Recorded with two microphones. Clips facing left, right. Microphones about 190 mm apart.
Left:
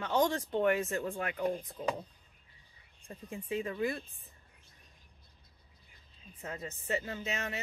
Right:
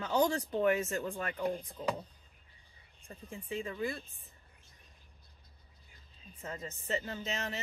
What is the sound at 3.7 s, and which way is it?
Speech, 20° left (ahead or behind).